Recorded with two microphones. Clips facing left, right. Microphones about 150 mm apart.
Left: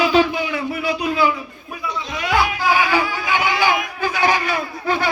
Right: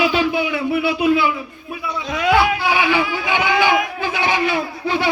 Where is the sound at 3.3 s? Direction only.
40° left (ahead or behind).